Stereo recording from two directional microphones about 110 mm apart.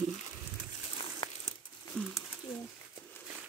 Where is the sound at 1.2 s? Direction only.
50° left (ahead or behind).